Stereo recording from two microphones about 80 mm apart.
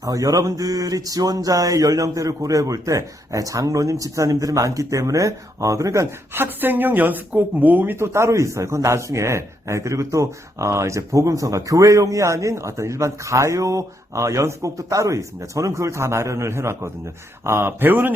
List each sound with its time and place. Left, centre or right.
0.0 s a sound: right
6.3 s speech: right
8.0 s speech: right